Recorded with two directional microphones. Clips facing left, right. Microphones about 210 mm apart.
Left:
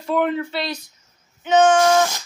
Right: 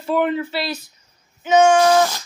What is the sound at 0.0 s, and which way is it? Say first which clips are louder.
Speech: right 1 dB; 5° right (ahead or behind).